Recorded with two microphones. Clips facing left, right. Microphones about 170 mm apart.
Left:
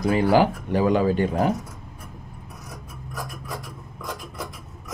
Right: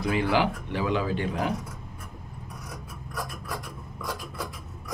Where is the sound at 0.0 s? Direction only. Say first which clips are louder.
Left 6 dB; 40° left (ahead or behind).